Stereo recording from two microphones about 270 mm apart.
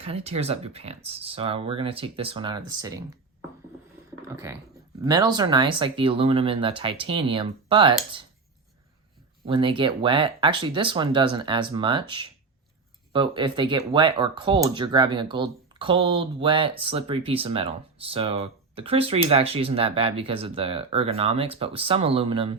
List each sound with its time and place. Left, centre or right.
0.0 s speech: right
4.5 s speech: centre
9.5 s speech: centre